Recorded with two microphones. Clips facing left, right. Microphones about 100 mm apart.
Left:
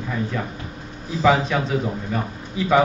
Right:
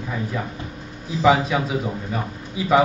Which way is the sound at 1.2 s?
5° right (ahead or behind).